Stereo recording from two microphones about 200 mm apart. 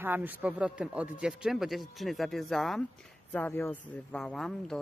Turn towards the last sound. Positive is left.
turn(degrees=5)  # may be behind; listen again after turning